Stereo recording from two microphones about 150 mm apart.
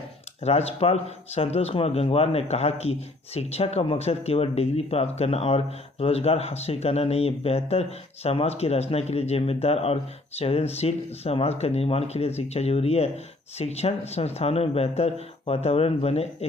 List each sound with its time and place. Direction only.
0.4 s speech: 45° left (ahead or behind)